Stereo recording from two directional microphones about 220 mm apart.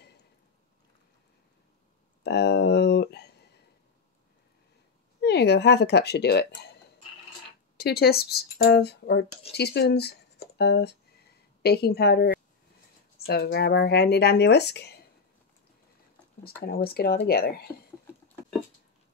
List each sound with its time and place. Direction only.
2.2 s speech: 50° left (ahead or behind)
5.2 s speech: 50° left (ahead or behind)
16.6 s speech: 45° left (ahead or behind)